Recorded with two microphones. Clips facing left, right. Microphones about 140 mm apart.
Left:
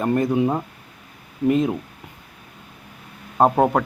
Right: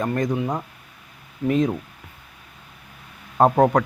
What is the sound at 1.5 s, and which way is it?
Speech, 5° left (ahead or behind).